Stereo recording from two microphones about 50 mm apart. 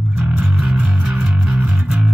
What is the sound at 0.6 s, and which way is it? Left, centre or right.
Music, right.